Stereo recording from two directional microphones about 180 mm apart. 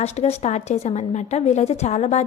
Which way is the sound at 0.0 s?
35° left (ahead or behind).